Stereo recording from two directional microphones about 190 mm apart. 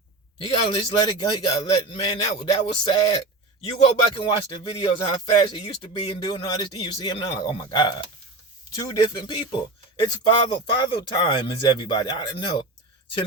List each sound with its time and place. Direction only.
0.3 s a man's voice: 30° left (ahead or behind)